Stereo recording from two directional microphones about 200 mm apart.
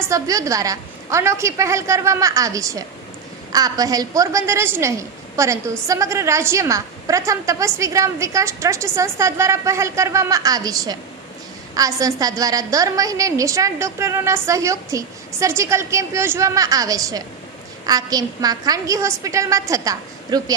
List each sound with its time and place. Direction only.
0.0 s a woman's voice: 15° right (ahead or behind)